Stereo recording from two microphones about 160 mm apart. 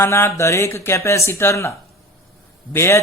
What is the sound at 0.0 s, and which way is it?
Speech, 15° left (ahead or behind).